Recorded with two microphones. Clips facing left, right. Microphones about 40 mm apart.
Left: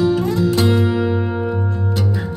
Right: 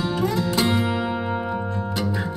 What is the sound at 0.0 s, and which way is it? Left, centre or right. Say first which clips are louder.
Music: left 6 dB; centre.